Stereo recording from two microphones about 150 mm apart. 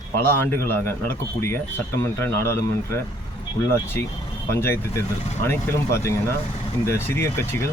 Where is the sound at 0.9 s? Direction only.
15° left (ahead or behind).